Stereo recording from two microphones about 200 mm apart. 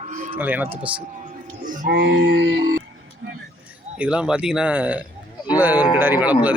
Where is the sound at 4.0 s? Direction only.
5° right (ahead or behind).